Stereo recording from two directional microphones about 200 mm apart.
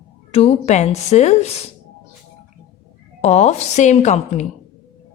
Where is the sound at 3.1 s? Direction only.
35° left (ahead or behind).